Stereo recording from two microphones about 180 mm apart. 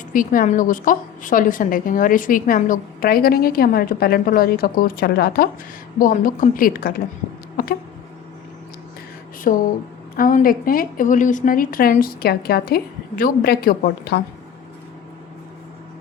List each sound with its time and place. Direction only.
0.1 s a woman's voice: 50° left (ahead or behind)
7.5 s a sound: 55° left (ahead or behind)
9.5 s a woman's voice: 50° left (ahead or behind)